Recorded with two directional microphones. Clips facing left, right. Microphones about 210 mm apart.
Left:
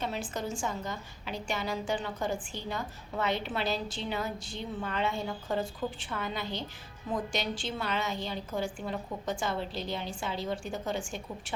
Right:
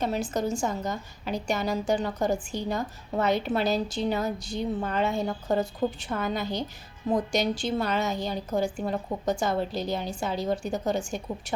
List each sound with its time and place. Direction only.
0.0 s a woman's voice: 40° right (ahead or behind)